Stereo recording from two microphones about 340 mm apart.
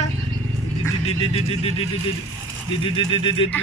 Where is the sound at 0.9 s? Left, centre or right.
Centre.